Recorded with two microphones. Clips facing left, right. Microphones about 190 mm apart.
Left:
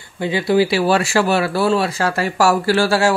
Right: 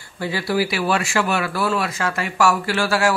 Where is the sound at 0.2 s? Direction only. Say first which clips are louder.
Left 6 dB; 20° left (ahead or behind).